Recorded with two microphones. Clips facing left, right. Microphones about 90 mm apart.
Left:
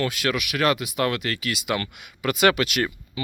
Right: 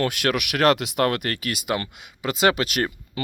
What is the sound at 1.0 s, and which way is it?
Speech, 50° right (ahead or behind).